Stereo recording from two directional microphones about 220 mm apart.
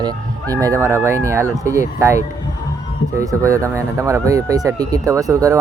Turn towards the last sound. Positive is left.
turn(degrees=-15)  # may be behind; listen again after turning